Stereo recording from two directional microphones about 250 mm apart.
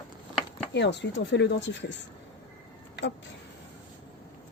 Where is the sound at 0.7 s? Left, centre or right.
Left.